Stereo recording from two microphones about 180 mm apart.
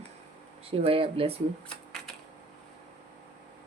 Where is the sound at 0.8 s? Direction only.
30° right (ahead or behind).